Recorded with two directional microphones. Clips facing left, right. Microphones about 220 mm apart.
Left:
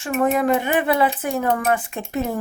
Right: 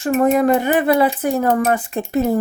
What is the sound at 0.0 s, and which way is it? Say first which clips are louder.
Speech: right 5 dB; 40° right (ahead or behind).